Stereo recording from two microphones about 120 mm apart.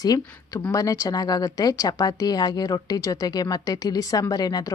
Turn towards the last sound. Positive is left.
turn(degrees=35)  # may be behind; listen again after turning